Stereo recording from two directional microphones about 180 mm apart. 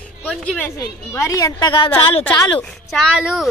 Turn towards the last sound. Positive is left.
turn(degrees=0)  # may be behind; listen again after turning